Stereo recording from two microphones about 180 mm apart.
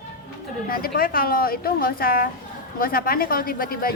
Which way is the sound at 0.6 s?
55° left (ahead or behind).